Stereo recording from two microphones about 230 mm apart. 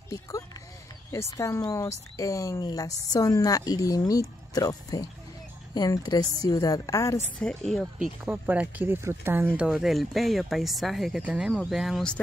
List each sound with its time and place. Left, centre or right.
1.1 s speech: centre
7.3 s speech: centre